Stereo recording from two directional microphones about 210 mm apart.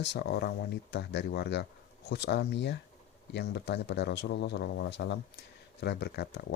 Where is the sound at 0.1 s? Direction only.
55° left (ahead or behind).